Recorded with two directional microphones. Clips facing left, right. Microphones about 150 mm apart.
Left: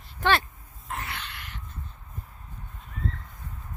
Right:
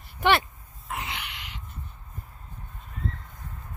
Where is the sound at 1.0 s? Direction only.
15° right (ahead or behind).